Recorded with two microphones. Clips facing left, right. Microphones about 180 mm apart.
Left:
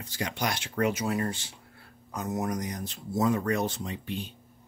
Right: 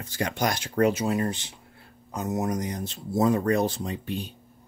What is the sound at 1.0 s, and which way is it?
Speech, 20° right (ahead or behind).